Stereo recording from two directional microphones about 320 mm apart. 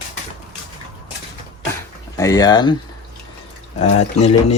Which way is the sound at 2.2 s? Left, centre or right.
Centre.